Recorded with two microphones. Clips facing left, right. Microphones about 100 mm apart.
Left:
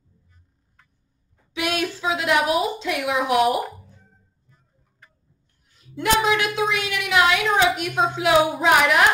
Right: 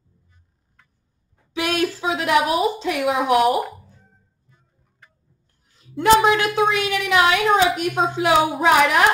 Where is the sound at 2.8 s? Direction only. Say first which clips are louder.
Right 3 dB; 40° right (ahead or behind).